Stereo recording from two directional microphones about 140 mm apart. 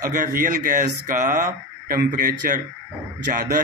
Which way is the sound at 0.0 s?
70° right (ahead or behind).